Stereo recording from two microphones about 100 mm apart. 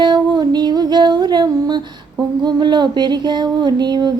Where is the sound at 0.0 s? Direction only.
45° right (ahead or behind).